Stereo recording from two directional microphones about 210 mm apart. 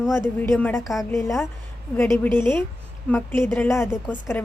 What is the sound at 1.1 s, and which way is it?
Speech, 15° left (ahead or behind).